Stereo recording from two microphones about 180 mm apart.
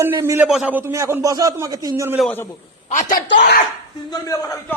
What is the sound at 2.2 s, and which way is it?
Speech, 10° left (ahead or behind).